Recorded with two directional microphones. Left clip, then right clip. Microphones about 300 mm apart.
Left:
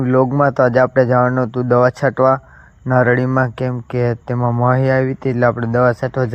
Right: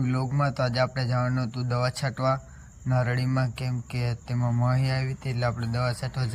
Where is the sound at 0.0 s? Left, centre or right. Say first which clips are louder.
Left 15 dB; left.